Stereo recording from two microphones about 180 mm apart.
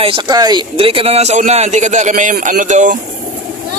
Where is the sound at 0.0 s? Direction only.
25° right (ahead or behind); by 3.0 s 45° right (ahead or behind).